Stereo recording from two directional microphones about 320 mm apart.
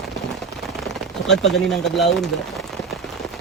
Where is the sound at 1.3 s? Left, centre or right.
Centre.